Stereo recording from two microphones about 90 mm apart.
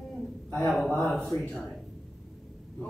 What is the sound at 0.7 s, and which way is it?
Speech, centre (ahead or behind).